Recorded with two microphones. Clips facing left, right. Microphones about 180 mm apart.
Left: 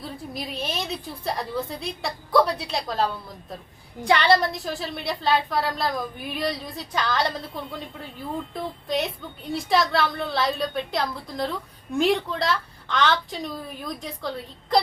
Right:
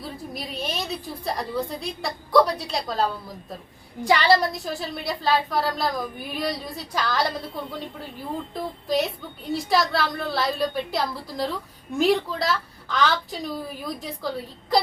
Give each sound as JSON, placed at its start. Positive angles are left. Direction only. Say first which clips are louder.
{"t": 0.0, "sound": "a woman's voice", "louder": "even", "side_deg": 0}